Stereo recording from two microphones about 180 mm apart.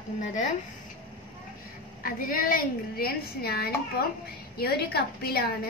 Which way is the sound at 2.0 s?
50° left (ahead or behind).